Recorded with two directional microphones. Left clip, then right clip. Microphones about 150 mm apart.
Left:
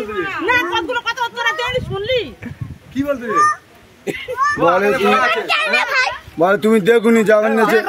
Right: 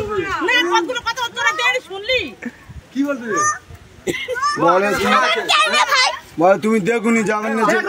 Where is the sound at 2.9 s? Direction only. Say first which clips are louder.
Left 1 dB; 10° right (ahead or behind).